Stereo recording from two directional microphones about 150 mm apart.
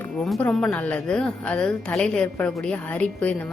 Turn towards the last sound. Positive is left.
turn(degrees=10)  # may be behind; listen again after turning